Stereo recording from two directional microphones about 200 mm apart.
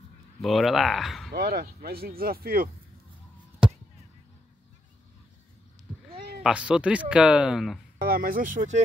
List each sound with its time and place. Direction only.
0.4 s speech: centre (ahead or behind)
1.3 s speech: 50° right (ahead or behind)
6.4 s speech: 5° right (ahead or behind)
8.0 s speech: 45° right (ahead or behind)